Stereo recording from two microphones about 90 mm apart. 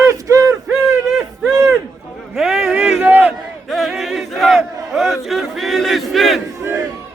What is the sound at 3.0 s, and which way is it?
Battle cry, 20° right (ahead or behind).